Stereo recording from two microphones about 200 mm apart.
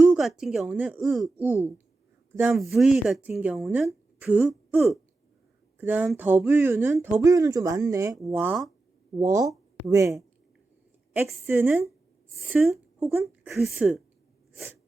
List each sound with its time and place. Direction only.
0.0 s speech: 5° right (ahead or behind)
9.1 s speech: 15° right (ahead or behind)
11.3 s speech: 10° right (ahead or behind)